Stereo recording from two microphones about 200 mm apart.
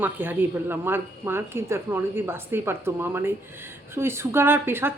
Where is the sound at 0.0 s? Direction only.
10° right (ahead or behind).